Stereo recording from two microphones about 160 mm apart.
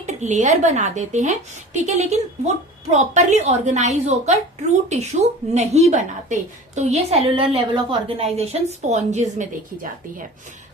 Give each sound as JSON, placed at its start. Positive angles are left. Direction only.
{"t": 0.0, "sound": "a woman's voice", "side_deg": -45}